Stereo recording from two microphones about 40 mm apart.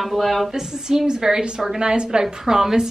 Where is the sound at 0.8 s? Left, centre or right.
Centre.